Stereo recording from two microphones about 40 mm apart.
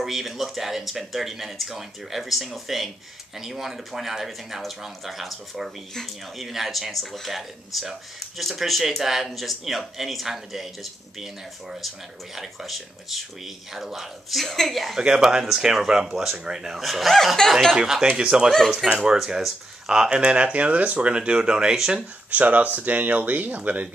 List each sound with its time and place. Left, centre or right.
0.0 s speech: centre
12.4 s speech: centre
15.0 s speech: centre
16.8 s speech: centre
17.7 s speech: centre
18.8 s speech: centre
19.1 s speech: centre
22.3 s speech: right